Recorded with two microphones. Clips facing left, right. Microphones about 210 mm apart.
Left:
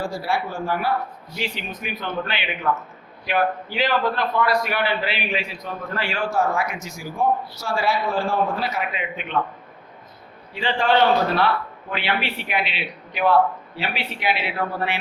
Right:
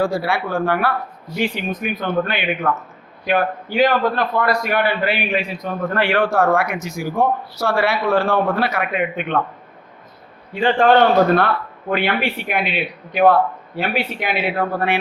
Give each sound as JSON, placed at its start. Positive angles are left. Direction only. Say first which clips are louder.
{"t": 0.0, "sound": "a man's voice", "louder": "right 5 dB", "side_deg": -60}
{"t": 1.4, "sound": "a man's voice", "louder": "right 8 dB", "side_deg": -50}
{"t": 10.5, "sound": "a man's voice", "louder": "right 6 dB", "side_deg": -50}